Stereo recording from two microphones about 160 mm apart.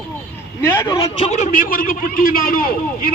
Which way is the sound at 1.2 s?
50° left (ahead or behind).